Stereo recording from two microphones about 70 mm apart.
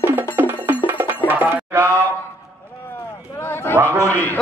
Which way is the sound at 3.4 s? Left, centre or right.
Left.